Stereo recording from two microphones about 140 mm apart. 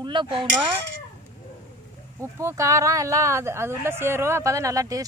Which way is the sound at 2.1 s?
20° right (ahead or behind).